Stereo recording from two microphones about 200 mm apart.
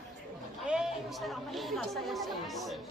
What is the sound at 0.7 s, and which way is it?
Speech, centre (ahead or behind).